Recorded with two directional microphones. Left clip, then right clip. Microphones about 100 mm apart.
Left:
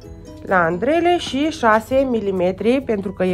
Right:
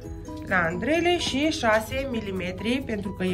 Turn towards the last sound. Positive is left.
turn(degrees=50)  # may be behind; listen again after turning